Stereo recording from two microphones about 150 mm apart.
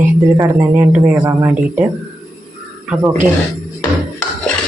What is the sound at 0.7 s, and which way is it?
Speech, 10° right (ahead or behind).